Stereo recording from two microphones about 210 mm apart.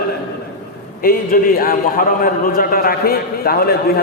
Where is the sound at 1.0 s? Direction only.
45° left (ahead or behind).